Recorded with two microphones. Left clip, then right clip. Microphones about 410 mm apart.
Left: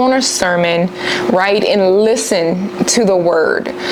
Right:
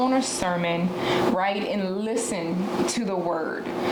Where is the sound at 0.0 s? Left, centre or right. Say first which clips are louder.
Left 11 dB; left.